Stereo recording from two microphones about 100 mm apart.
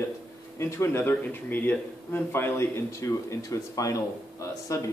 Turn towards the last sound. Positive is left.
turn(degrees=30)  # may be behind; listen again after turning